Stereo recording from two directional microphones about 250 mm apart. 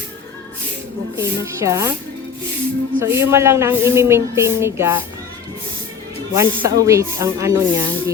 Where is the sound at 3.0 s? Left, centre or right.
Centre.